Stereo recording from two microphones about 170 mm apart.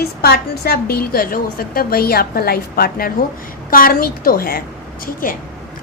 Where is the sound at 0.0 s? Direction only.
65° left (ahead or behind).